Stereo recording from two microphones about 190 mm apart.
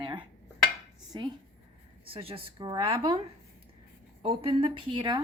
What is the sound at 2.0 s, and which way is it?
Speech, 30° right (ahead or behind).